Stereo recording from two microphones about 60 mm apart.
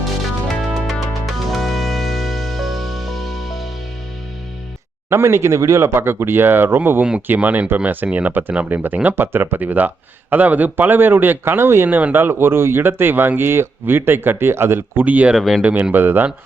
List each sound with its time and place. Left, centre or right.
0.9 s music: centre
5.0 s speech: right
5.9 s speech: right
7.3 s speech: right
11.9 s speech: right
12.3 s speech: right
15.0 s speech: right
15.4 s speech: centre
15.6 s speech: right